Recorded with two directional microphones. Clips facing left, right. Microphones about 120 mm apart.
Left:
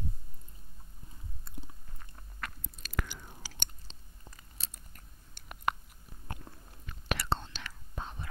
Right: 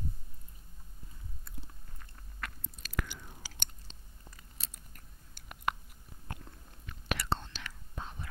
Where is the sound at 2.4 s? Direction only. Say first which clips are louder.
Left 1 dB; 30° left (ahead or behind).